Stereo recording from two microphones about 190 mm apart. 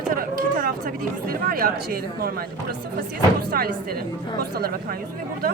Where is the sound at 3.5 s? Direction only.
55° right (ahead or behind).